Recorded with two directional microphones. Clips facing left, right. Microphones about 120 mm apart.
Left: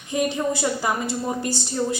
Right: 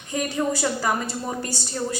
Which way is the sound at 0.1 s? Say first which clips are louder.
Left 2 dB; 20° left (ahead or behind).